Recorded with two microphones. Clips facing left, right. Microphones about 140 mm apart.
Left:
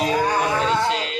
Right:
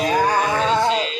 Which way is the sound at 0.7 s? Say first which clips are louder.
Right 2 dB; 20° right (ahead or behind).